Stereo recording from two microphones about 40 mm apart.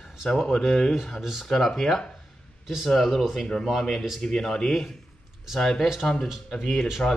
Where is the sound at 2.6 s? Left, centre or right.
Centre.